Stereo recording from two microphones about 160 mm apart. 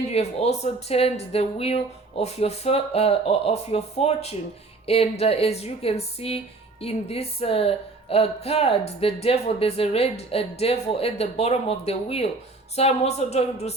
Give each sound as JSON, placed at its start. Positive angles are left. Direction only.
{"t": 0.1, "sound": "a woman's voice", "side_deg": 40}